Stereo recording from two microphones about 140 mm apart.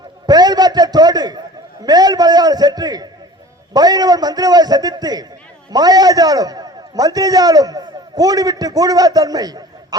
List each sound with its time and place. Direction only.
0.3 s a man's voice: 30° right (ahead or behind)